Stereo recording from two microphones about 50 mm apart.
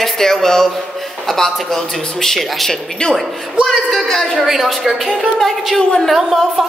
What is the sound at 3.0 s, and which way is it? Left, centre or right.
Speech, centre.